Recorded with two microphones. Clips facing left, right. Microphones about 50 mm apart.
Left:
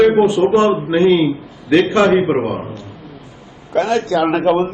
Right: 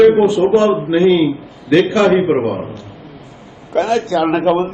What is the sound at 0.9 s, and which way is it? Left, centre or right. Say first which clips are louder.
A man's voice: right 1 dB; centre.